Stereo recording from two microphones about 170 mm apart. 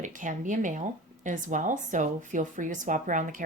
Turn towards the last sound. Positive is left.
turn(degrees=-50)  # may be behind; listen again after turning